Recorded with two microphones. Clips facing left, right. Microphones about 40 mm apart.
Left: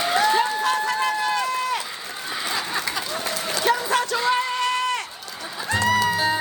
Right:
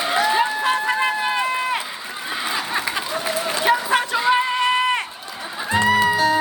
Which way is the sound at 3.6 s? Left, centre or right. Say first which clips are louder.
Right 2 dB; right.